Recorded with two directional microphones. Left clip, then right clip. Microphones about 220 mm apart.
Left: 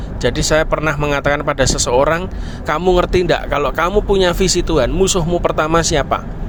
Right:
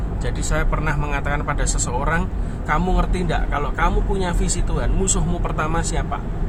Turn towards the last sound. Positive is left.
turn(degrees=40)  # may be behind; listen again after turning